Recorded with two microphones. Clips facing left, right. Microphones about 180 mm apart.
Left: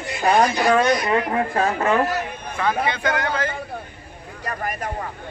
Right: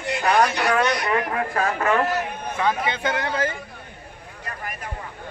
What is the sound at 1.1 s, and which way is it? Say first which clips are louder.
Speech: left 3 dB; 30° left (ahead or behind).